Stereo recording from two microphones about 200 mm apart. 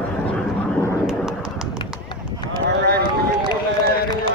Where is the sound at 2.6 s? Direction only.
55° right (ahead or behind).